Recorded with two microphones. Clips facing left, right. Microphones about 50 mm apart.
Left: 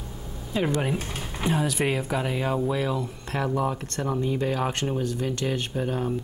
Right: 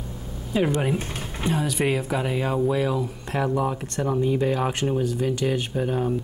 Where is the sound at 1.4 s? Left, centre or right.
Centre.